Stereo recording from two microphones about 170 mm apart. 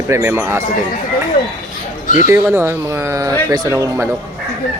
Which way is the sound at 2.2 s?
10° right (ahead or behind).